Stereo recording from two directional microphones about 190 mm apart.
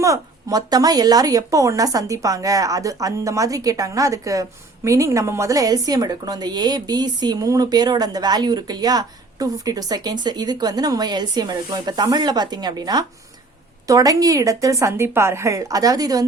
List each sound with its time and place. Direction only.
0.0 s speech: 15° right (ahead or behind)